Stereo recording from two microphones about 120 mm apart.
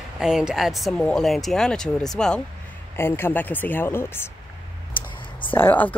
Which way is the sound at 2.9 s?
20° left (ahead or behind).